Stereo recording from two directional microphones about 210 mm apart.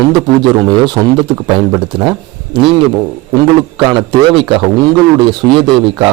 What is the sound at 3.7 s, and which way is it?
Speech, 20° right (ahead or behind).